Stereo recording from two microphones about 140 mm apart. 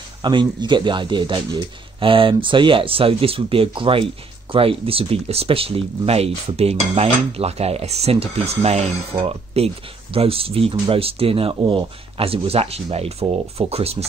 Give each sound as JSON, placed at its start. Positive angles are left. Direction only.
{"t": 0.2, "sound": "a man's voice", "side_deg": -35}